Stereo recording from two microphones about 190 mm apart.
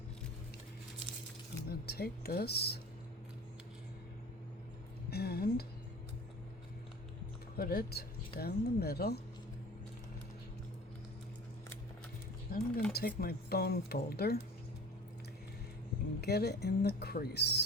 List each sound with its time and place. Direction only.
1.7 s speech: 55° left (ahead or behind)
5.1 s a sound: 55° left (ahead or behind)
7.5 s speech: 55° left (ahead or behind)
12.5 s speech: 50° left (ahead or behind)
16.2 s speech: 55° left (ahead or behind)